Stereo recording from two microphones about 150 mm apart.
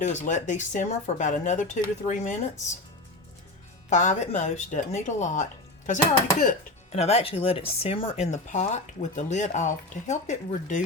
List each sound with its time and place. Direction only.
0.0 s speech: 50° left (ahead or behind)
3.8 s speech: 50° left (ahead or behind)
6.9 s speech: 40° left (ahead or behind)